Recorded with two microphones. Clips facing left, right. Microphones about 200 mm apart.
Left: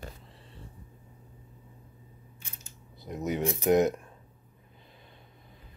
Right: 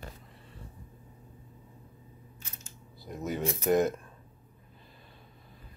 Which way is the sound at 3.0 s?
20° left (ahead or behind).